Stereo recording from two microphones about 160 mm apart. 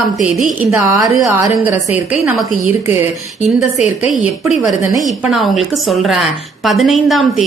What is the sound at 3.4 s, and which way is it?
Speech, 45° left (ahead or behind).